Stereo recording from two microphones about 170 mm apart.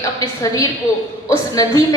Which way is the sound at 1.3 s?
20° left (ahead or behind).